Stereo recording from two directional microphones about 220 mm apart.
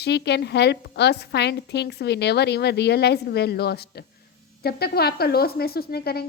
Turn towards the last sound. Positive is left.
turn(degrees=45)  # may be behind; listen again after turning